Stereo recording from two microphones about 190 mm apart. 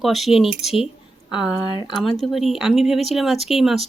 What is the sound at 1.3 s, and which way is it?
Speech, 25° left (ahead or behind).